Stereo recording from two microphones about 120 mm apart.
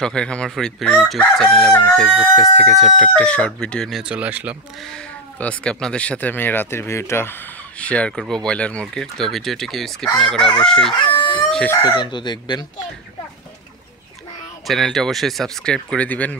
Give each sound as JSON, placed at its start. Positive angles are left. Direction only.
{"t": 0.0, "sound": "speech", "side_deg": 5}
{"t": 4.0, "sound": "speech", "side_deg": -10}
{"t": 4.9, "sound": "speech", "side_deg": 10}
{"t": 7.8, "sound": "speech", "side_deg": 10}
{"t": 11.8, "sound": "speech", "side_deg": 40}
{"t": 14.7, "sound": "speech", "side_deg": 0}